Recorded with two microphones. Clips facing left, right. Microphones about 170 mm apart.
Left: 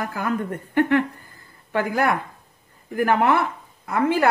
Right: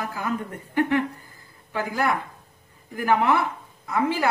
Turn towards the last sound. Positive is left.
turn(degrees=55)  # may be behind; listen again after turning